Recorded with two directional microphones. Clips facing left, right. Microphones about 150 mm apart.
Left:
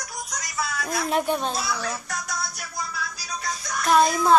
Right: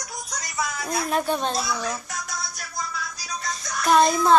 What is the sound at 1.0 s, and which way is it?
Speech, 15° left (ahead or behind).